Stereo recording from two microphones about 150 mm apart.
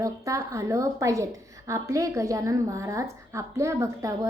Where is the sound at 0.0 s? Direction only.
20° right (ahead or behind).